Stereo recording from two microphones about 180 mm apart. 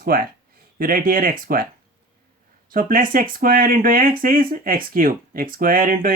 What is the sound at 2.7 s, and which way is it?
Speech, 50° right (ahead or behind).